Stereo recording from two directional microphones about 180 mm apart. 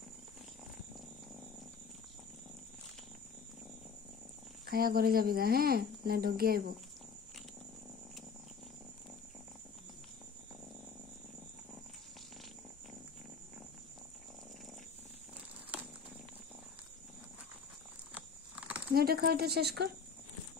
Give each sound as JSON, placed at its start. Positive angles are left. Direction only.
{"t": 4.6, "sound": "speech", "side_deg": -55}
{"t": 18.1, "sound": "a sound", "side_deg": -5}
{"t": 18.9, "sound": "speech", "side_deg": -60}